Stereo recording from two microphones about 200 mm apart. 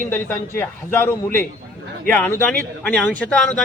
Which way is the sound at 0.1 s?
10° left (ahead or behind).